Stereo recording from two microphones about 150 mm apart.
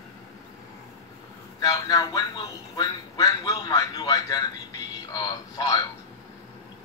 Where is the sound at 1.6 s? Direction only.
25° left (ahead or behind).